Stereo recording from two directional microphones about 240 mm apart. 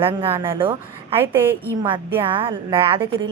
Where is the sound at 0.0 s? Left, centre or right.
Right.